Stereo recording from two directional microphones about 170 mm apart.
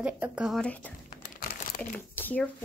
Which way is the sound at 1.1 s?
55° left (ahead or behind).